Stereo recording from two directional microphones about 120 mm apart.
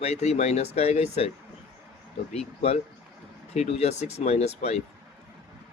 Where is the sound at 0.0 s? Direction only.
65° left (ahead or behind).